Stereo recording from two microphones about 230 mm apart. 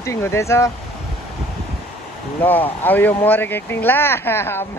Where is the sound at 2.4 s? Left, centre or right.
Centre.